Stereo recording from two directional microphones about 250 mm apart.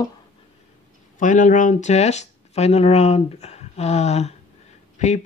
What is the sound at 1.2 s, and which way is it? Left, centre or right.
Speech, left.